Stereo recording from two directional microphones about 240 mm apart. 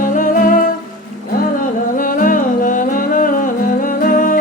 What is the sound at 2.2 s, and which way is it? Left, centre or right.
Music, left.